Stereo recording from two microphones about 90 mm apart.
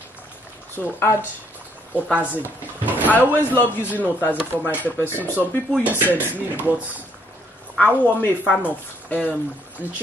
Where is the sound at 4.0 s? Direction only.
20° right (ahead or behind).